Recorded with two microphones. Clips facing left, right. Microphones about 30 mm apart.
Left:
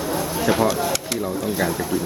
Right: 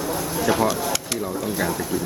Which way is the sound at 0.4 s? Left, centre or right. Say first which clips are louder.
Left 1 dB; centre.